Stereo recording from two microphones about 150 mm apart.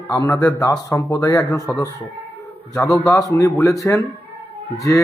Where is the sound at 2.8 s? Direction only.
20° left (ahead or behind).